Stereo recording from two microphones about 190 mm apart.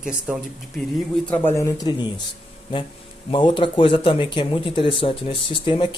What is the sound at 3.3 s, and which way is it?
Speech, 25° left (ahead or behind).